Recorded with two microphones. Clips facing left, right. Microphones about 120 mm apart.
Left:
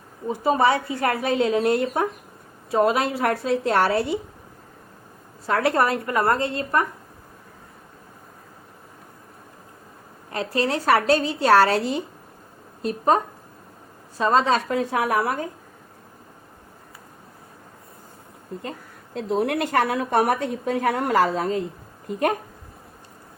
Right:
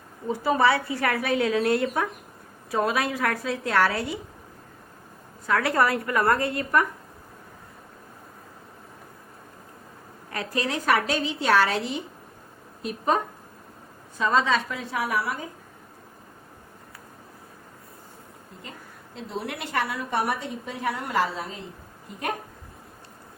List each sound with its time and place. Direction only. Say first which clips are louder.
0.3 s a woman's voice: left 2 dB; 20° left (ahead or behind)
5.5 s a woman's voice: left 2 dB; 25° left (ahead or behind)
10.3 s a woman's voice: left 5 dB; 30° left (ahead or behind); by 15.4 s 50° left (ahead or behind)
19.1 s a woman's voice: left 10 dB; 50° left (ahead or behind)